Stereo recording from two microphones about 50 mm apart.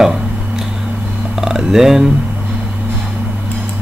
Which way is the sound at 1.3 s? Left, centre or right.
Centre.